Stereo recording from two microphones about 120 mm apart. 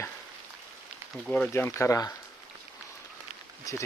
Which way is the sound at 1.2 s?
5° left (ahead or behind).